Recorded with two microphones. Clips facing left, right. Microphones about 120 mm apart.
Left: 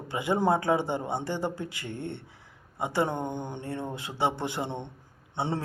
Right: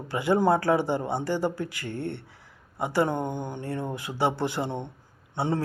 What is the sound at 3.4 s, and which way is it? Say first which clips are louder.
Speech: right 2 dB; 25° left (ahead or behind).